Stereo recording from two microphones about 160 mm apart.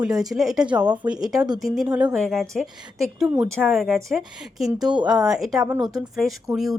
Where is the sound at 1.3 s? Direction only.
25° right (ahead or behind).